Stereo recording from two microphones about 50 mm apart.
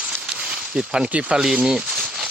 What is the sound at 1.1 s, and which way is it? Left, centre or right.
Speech, right.